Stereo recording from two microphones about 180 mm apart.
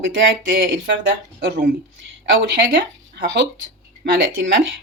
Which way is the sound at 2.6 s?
75° right (ahead or behind).